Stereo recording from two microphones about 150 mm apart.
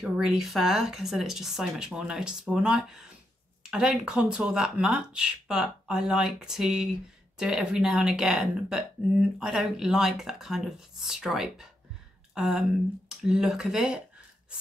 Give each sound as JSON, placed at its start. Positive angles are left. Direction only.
{"t": 0.0, "sound": "speech", "side_deg": -5}